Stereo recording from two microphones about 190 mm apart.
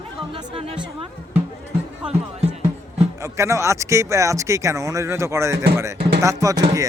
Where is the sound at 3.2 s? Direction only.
15° right (ahead or behind).